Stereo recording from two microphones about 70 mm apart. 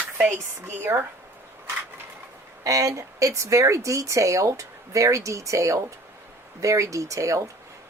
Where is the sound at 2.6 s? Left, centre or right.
Right.